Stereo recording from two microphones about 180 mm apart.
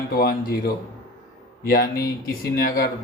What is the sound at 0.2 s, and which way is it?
A man's voice, 60° left (ahead or behind).